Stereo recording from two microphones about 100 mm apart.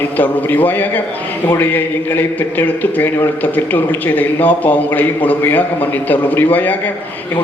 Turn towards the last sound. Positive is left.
turn(degrees=20)  # may be behind; listen again after turning